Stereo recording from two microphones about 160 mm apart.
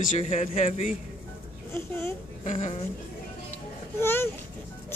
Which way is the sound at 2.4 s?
45° left (ahead or behind).